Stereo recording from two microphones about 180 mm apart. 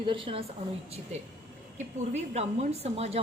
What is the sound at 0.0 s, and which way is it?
Speech, 30° right (ahead or behind).